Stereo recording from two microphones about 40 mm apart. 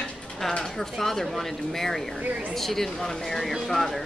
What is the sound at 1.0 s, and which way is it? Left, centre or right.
A woman's voice, centre.